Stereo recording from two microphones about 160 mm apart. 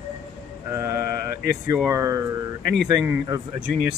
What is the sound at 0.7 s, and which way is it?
Speech, 15° right (ahead or behind).